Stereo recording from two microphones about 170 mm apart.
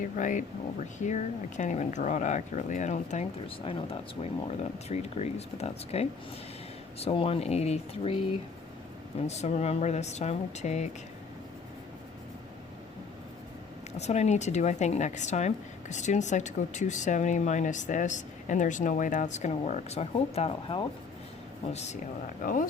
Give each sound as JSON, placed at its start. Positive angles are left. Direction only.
{"t": 0.0, "sound": "speech", "side_deg": 50}
{"t": 9.2, "sound": "speech", "side_deg": 40}
{"t": 14.0, "sound": "speech", "side_deg": 40}
{"t": 22.4, "sound": "speech", "side_deg": 50}